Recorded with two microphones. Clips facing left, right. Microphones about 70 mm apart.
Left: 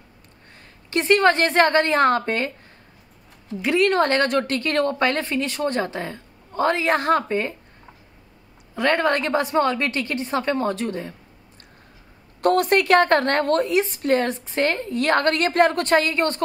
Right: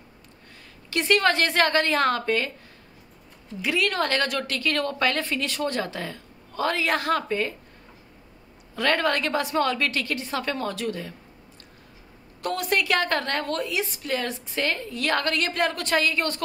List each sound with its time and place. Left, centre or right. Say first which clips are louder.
0.8 s a woman's voice: left 4 dB; left
3.6 s a woman's voice: left 6 dB; left
8.7 s a woman's voice: left 3 dB; left
12.4 s a woman's voice: left 8 dB; left